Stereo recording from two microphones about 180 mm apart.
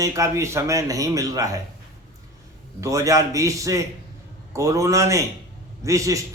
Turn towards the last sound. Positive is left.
turn(degrees=-20)  # may be behind; listen again after turning